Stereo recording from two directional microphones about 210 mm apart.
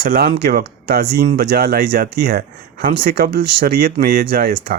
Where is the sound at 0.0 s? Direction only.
45° right (ahead or behind).